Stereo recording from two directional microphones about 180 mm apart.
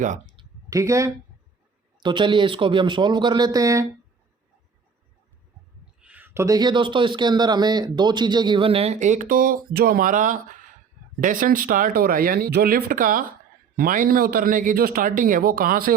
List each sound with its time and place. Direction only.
0.3 s a sound: 20° right (ahead or behind)
2.0 s a man's voice: 25° right (ahead or behind)
6.0 s a man's voice: 10° right (ahead or behind); by 16.0 s 50° right (ahead or behind)